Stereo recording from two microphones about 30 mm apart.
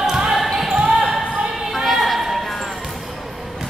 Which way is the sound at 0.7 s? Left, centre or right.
Centre.